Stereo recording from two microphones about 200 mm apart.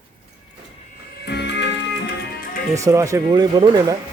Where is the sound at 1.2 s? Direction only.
60° left (ahead or behind).